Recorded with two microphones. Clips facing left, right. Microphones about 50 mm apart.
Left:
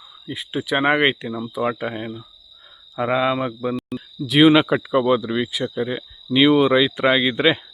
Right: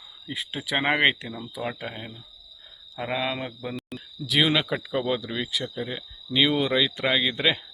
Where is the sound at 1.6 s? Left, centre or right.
Left.